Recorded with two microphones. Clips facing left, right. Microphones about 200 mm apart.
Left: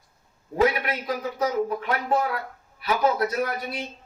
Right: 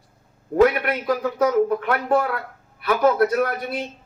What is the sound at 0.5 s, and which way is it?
A man's voice, 55° right (ahead or behind).